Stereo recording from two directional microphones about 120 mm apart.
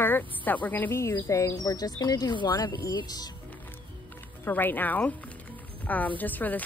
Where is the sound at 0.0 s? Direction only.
15° left (ahead or behind); by 3.3 s 35° left (ahead or behind).